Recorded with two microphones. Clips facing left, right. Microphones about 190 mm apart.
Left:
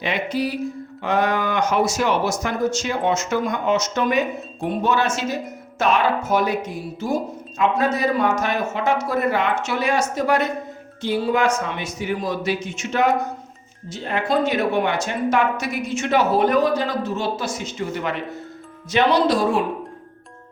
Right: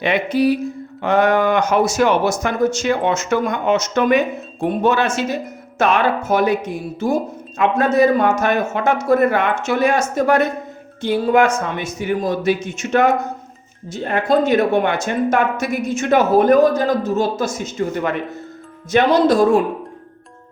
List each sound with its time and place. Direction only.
0.0 s speech: 60° right (ahead or behind)
7.6 s speech: 50° right (ahead or behind)